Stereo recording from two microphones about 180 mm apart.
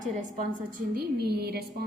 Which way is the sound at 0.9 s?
60° right (ahead or behind).